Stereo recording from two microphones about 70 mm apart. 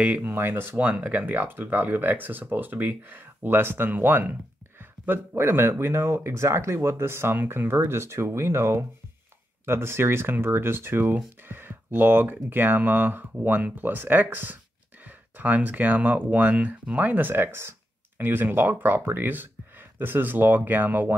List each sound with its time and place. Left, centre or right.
0.0 s speech: right
0.7 s speech: centre